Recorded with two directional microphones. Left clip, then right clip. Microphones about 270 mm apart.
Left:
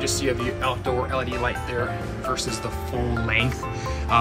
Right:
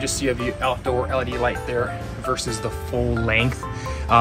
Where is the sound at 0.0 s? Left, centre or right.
Centre.